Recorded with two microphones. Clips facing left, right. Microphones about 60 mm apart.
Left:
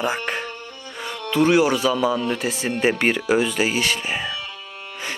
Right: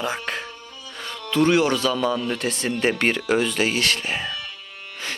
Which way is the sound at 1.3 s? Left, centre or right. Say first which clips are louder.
Left 1 dB; centre.